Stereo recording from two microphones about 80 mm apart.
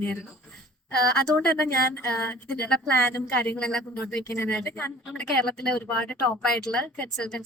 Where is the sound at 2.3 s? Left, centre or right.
Centre.